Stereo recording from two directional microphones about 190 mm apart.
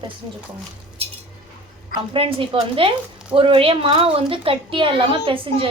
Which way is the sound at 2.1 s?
30° right (ahead or behind).